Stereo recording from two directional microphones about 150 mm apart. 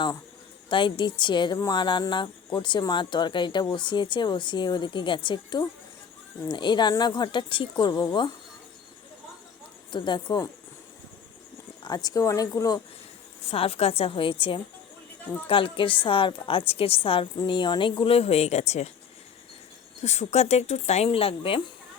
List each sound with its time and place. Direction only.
0.7 s speech: 35° left (ahead or behind)
9.9 s speech: 30° left (ahead or behind)
11.8 s speech: 25° left (ahead or behind)
13.5 s speech: 40° left (ahead or behind)
20.0 s speech: 50° left (ahead or behind)